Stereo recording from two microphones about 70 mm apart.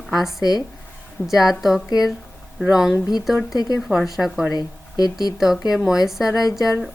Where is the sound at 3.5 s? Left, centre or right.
Left.